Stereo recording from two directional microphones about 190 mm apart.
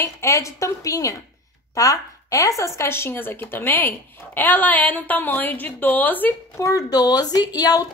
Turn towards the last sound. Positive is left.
turn(degrees=20)  # may be behind; listen again after turning